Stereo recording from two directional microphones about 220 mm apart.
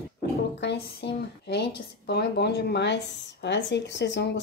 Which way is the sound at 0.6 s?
50° left (ahead or behind).